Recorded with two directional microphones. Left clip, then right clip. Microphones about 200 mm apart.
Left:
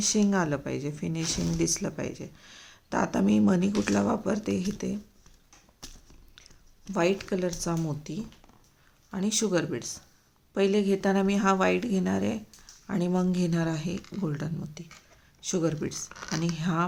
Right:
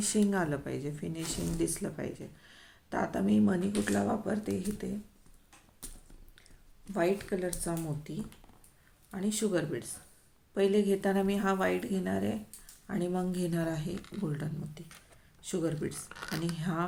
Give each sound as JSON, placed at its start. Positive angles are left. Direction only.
{"t": 0.0, "sound": "speech", "side_deg": 25}
{"t": 6.9, "sound": "speech", "side_deg": 35}
{"t": 13.9, "sound": "speech", "side_deg": 0}
{"t": 14.2, "sound": "speech", "side_deg": 25}
{"t": 16.0, "sound": "speech", "side_deg": -5}
{"t": 16.6, "sound": "speech", "side_deg": 25}